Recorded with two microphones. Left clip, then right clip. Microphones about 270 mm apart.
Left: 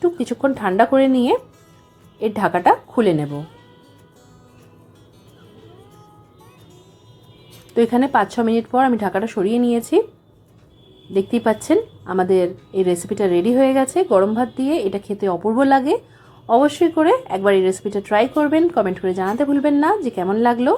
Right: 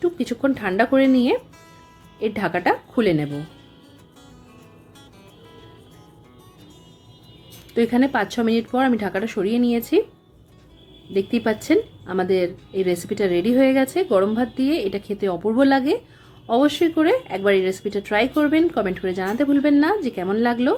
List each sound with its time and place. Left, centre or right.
0.0 s a woman's voice: centre
7.7 s a woman's voice: centre
11.1 s a woman's voice: centre